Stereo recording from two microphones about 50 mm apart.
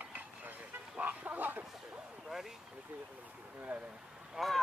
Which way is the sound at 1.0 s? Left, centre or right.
Right.